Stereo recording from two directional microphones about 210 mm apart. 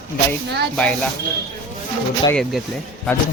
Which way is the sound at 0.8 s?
5° left (ahead or behind).